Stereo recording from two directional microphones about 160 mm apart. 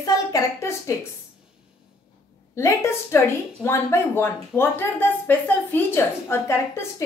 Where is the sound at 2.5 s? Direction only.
15° left (ahead or behind).